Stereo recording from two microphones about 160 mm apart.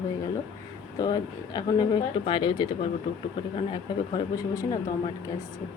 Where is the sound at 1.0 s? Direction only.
25° left (ahead or behind).